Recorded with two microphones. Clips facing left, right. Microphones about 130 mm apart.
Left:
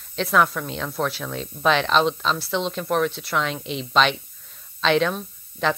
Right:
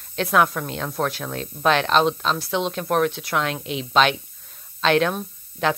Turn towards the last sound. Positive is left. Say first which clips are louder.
# right 1 dB
turn(degrees=-5)  # may be behind; listen again after turning